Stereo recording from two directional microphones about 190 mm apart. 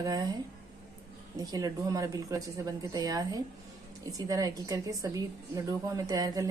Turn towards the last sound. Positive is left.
turn(degrees=-20)  # may be behind; listen again after turning